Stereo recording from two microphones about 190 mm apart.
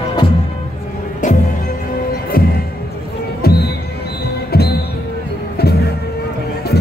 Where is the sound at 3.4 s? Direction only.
55° left (ahead or behind).